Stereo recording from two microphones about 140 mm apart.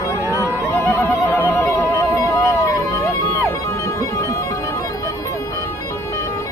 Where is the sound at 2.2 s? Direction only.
20° left (ahead or behind).